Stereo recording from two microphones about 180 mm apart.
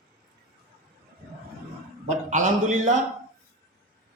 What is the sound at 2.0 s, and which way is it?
Speech, 45° right (ahead or behind).